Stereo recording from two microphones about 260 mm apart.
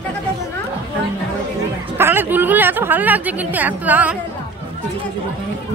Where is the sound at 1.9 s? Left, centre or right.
Centre.